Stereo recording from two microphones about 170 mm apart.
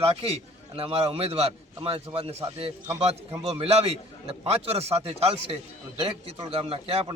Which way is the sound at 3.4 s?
35° right (ahead or behind).